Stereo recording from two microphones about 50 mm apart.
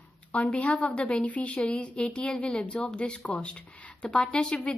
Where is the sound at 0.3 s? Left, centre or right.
Left.